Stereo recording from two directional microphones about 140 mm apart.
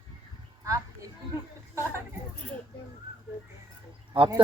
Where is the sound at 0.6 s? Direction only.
25° right (ahead or behind).